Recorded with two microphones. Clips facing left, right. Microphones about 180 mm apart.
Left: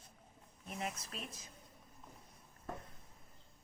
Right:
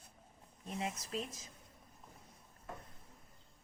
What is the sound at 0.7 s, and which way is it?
Speech, 30° right (ahead or behind).